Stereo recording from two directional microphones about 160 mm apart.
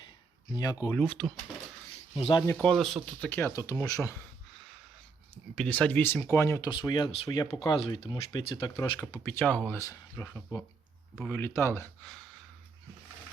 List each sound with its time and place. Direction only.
0.5 s speech: 25° left (ahead or behind)
0.9 s speech: 5° left (ahead or behind)
2.1 s speech: 35° left (ahead or behind)
2.5 s speech: 5° left (ahead or behind)
3.2 s speech: 15° left (ahead or behind)
5.5 s speech: 5° left (ahead or behind)
11.1 s speech: 5° left (ahead or behind)
11.3 s speech: 15° left (ahead or behind)